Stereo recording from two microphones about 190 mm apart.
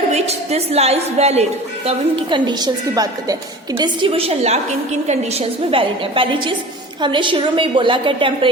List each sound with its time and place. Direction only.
0.1 s a woman's voice: 35° right (ahead or behind)